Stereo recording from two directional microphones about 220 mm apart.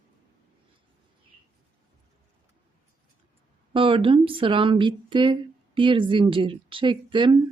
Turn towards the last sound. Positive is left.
turn(degrees=-20)  # may be behind; listen again after turning